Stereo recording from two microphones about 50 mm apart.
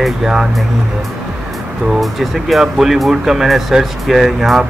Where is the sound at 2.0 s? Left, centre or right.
Centre.